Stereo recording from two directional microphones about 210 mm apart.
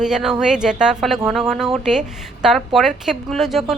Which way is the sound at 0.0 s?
Centre (ahead or behind).